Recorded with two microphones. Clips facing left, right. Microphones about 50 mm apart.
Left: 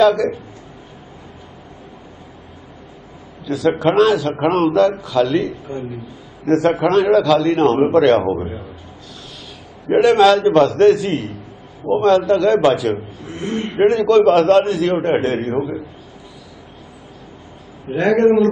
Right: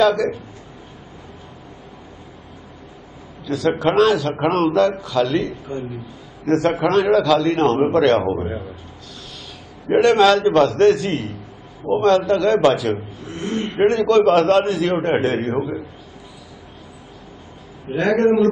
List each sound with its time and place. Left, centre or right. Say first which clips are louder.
0.0 s a man's voice: left 3 dB; centre
3.4 s a man's voice: left 2 dB; centre
9.8 s a man's voice: left 2 dB; centre
13.5 s a man's voice: left 1 dB; centre
13.7 s a man's voice: left 2 dB; centre
17.9 s a man's voice: left 2 dB; centre